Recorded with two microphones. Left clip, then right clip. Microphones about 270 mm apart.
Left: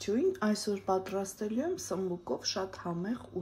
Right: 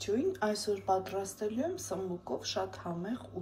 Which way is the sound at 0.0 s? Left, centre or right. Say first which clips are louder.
Left 1 dB; left.